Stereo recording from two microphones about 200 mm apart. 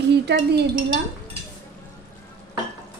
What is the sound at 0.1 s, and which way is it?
Dishes, 55° right (ahead or behind).